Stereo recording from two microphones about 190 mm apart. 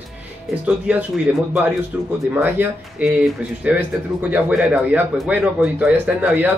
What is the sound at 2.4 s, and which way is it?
Speech, 10° right (ahead or behind).